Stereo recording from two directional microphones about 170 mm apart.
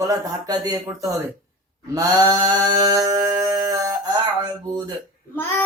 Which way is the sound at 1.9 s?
20° right (ahead or behind).